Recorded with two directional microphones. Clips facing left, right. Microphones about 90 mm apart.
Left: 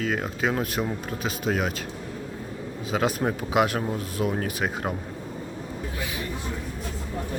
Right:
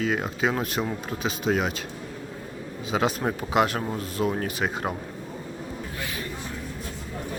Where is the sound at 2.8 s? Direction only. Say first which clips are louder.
Even; centre (ahead or behind).